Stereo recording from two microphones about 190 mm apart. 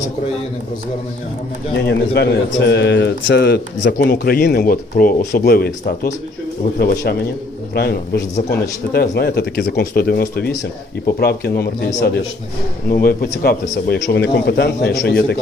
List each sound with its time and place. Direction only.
1.7 s a man's voice: 60° left (ahead or behind)
12.9 s a man's voice: 50° left (ahead or behind)